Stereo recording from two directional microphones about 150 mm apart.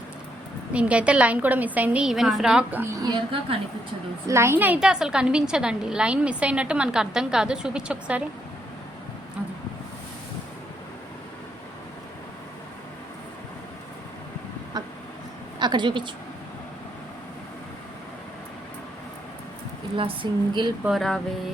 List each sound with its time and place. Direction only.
0.7 s a woman's voice: 10° right (ahead or behind)
2.9 s a woman's voice: 25° right (ahead or behind)
4.3 s a woman's voice: 20° right (ahead or behind)
15.5 s a woman's voice: 30° right (ahead or behind)
20.0 s speech: 35° right (ahead or behind)
20.8 s a woman's voice: centre (ahead or behind)